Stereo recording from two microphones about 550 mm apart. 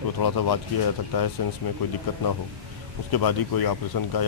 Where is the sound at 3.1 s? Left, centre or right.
Left.